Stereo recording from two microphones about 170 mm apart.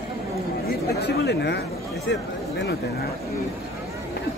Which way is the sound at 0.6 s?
80° left.